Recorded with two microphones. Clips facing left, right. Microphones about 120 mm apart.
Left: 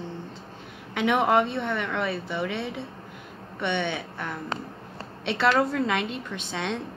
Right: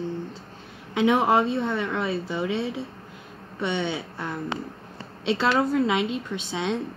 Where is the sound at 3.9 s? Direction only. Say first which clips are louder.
Right 2 dB; 20° right (ahead or behind).